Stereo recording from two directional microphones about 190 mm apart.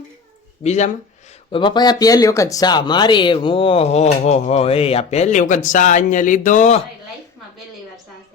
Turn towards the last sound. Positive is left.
turn(degrees=40)  # may be behind; listen again after turning